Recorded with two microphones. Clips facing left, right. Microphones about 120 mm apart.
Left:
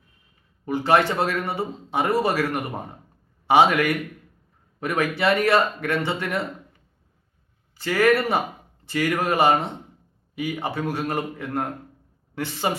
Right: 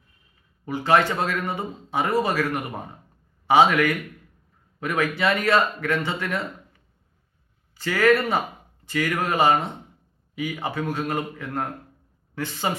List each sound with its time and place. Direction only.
0.6 s speech: 25° left (ahead or behind)
7.8 s speech: 25° left (ahead or behind)